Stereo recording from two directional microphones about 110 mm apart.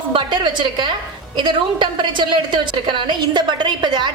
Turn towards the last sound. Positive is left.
turn(degrees=-45)  # may be behind; listen again after turning